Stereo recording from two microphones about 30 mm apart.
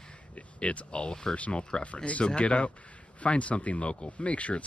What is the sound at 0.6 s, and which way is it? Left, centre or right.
Speech, left.